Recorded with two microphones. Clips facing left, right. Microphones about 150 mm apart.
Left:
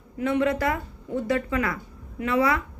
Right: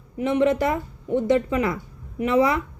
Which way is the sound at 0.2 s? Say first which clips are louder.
Right 3 dB; 20° right (ahead or behind).